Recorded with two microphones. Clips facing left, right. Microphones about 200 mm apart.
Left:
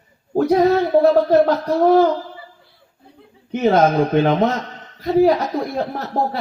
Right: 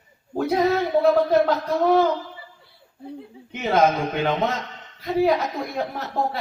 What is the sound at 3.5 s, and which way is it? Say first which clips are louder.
Speech: left 5 dB; 45° left (ahead or behind).